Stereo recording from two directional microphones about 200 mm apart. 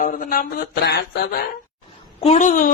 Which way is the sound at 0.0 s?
45° left (ahead or behind).